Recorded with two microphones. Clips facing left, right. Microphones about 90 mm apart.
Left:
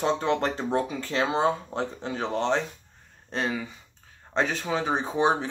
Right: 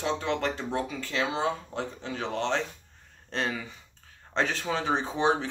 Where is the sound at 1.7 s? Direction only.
30° left (ahead or behind).